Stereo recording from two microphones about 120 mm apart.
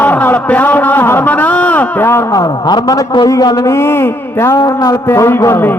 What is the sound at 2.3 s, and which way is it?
A man's voice, 30° left (ahead or behind).